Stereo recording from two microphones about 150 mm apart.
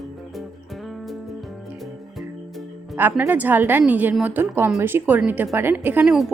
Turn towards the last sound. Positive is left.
turn(degrees=-5)  # may be behind; listen again after turning